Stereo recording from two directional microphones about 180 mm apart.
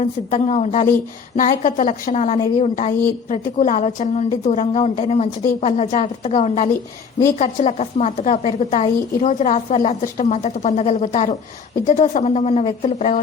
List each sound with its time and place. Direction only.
0.0 s a woman's voice: 40° left (ahead or behind)